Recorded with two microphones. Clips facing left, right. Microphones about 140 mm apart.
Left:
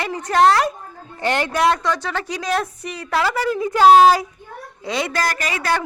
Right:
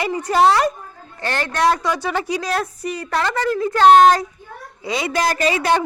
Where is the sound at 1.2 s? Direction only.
15° left (ahead or behind).